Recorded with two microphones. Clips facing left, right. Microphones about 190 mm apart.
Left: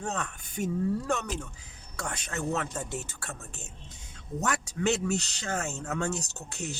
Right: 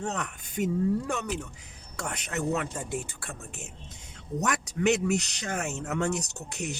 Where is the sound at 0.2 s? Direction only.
20° right (ahead or behind).